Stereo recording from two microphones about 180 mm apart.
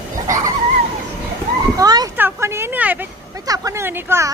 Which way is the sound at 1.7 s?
20° right (ahead or behind).